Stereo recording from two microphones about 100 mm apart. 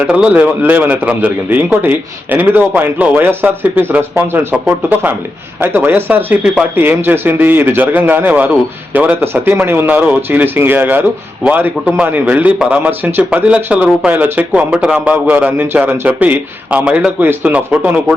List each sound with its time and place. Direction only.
0.1 s speech: 10° right (ahead or behind)
5.5 s speech: 25° right (ahead or behind)